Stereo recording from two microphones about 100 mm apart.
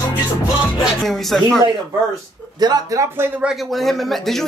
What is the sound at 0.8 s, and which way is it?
Speech, centre (ahead or behind).